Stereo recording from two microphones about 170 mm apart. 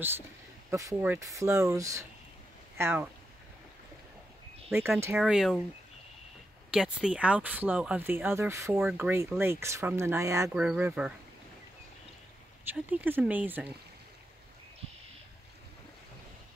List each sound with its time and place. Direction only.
0.7 s speech: 20° right (ahead or behind)
5.2 s speech: centre (ahead or behind)
6.7 s speech: 5° right (ahead or behind)
8.7 s speech: 5° right (ahead or behind)
10.5 s speech: 5° right (ahead or behind)
12.6 s speech: 10° right (ahead or behind)